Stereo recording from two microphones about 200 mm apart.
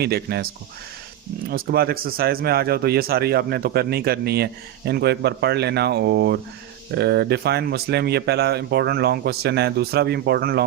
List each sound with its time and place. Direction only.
0.0 s speech: 55° right (ahead or behind)